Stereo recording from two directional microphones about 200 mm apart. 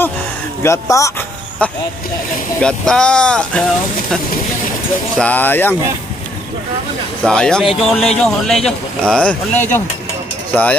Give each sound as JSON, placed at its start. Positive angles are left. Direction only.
{"t": 0.6, "sound": "speech", "side_deg": 15}
{"t": 5.1, "sound": "speech", "side_deg": 5}
{"t": 7.2, "sound": "speech", "side_deg": 5}